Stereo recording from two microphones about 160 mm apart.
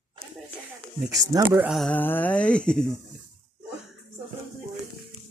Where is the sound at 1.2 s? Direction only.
20° right (ahead or behind).